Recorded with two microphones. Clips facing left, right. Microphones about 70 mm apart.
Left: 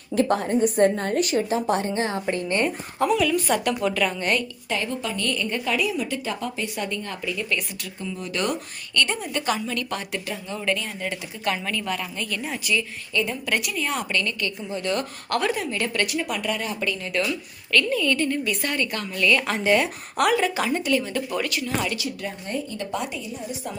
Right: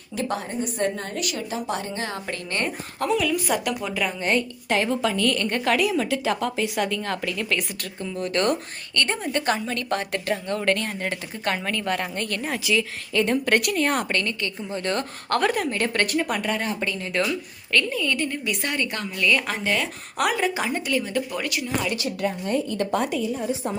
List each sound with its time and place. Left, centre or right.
0.2 s a woman's voice: left
3.1 s a woman's voice: centre
4.2 s a woman's voice: right
4.7 s a woman's voice: right
8.1 s a woman's voice: right
10.7 s speech: right
12.7 s a woman's voice: right
13.4 s a woman's voice: right; by 19.4 s centre
19.6 s speech: centre
20.1 s a woman's voice: centre
20.5 s a woman's voice: centre
22.4 s a woman's voice: right